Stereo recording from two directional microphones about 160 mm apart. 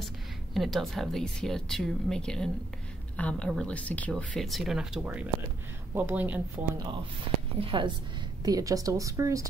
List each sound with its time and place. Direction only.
0.6 s speech: centre (ahead or behind)
7.6 s a woman's voice: 30° right (ahead or behind)